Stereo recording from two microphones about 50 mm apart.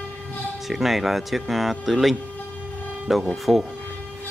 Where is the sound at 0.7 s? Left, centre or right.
Centre.